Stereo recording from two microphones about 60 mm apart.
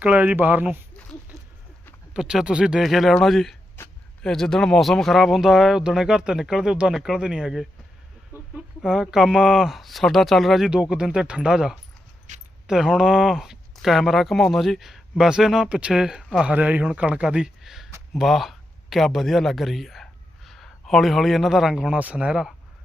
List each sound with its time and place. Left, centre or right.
0.0 s speech: right
2.1 s speech: centre
2.8 s speech: centre
8.8 s speech: centre
10.7 s speech: centre
16.6 s speech: right
17.6 s a sound: centre
18.2 s speech: centre
21.8 s speech: right